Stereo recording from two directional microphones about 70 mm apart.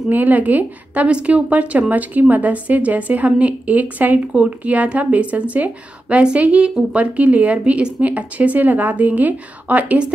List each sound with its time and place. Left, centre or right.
0.1 s a woman's voice: right